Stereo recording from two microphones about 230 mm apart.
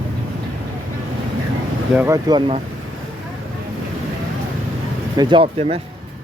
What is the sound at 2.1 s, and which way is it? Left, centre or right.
Speech, centre.